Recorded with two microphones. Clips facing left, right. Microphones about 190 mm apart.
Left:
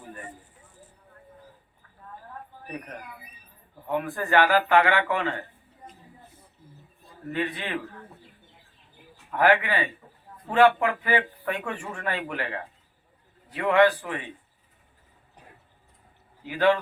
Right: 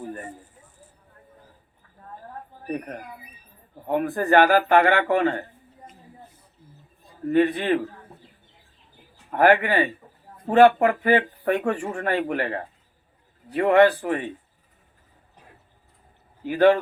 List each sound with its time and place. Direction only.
0.0 s a sound: 40° right (ahead or behind)
2.6 s speech: 45° right (ahead or behind)
7.3 s speech: 50° right (ahead or behind)
9.3 s speech: 50° right (ahead or behind)
16.4 s speech: 50° right (ahead or behind)